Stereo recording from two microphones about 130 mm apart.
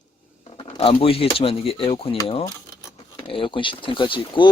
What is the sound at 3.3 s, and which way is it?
Speech, 40° left (ahead or behind).